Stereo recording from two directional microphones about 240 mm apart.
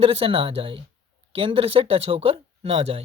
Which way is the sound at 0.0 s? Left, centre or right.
Right.